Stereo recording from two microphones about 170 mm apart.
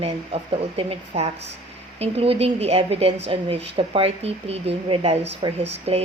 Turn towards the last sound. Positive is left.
turn(degrees=-35)  # may be behind; listen again after turning